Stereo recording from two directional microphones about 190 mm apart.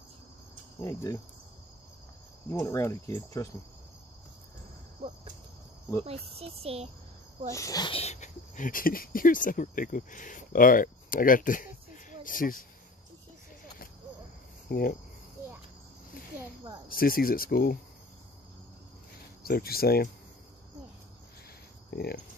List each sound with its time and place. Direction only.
0.7 s speech: 15° left (ahead or behind)
2.5 s speech: 15° left (ahead or behind)
6.0 s speech: 30° right (ahead or behind)
7.5 s speech: 20° left (ahead or behind); by 12.6 s 45° left (ahead or behind)
14.7 s cricket: 50° left (ahead or behind)
16.9 s speech: 50° left (ahead or behind)
19.4 s speech: 55° left (ahead or behind)
21.9 s speech: 55° left (ahead or behind)